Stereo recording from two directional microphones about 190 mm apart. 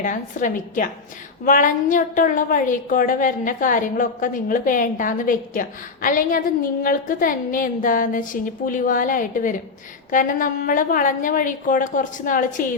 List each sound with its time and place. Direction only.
0.0 s a woman's voice: 40° left (ahead or behind)